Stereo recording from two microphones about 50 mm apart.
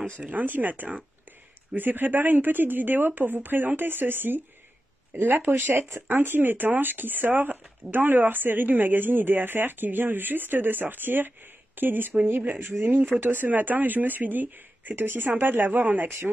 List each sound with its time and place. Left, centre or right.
0.2 s speech: right